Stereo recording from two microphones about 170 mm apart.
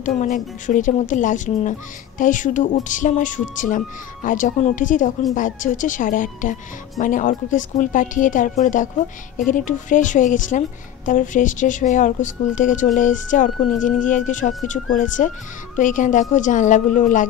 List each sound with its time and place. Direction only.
0.0 s speech: 45° left (ahead or behind)